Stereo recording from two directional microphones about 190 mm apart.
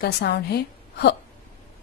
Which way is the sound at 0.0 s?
55° left (ahead or behind).